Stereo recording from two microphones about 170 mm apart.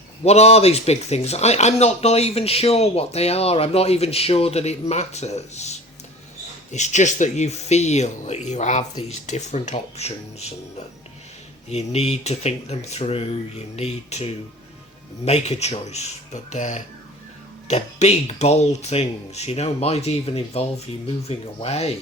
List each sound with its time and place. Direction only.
0.3 s speech: 40° left (ahead or behind)
11.7 s speech: 40° left (ahead or behind)